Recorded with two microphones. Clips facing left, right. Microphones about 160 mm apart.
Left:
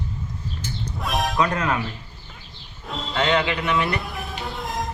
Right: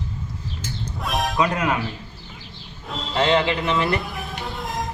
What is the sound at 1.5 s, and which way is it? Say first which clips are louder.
Speech: right 1 dB; 15° right (ahead or behind).